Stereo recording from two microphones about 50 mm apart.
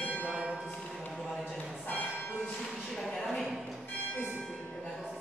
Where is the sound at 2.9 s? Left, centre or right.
Centre.